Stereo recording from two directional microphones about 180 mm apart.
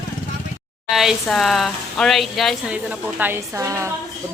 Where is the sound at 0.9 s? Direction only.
Centre (ahead or behind).